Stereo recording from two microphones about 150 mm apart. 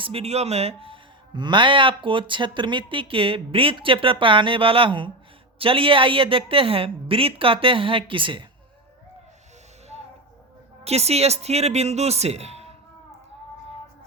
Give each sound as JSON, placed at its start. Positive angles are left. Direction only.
{"t": 0.0, "sound": "a man's voice", "side_deg": -40}
{"t": 10.8, "sound": "speech", "side_deg": -45}